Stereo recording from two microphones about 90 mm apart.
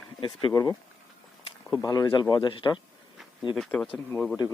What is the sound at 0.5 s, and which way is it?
Speech, 45° left (ahead or behind).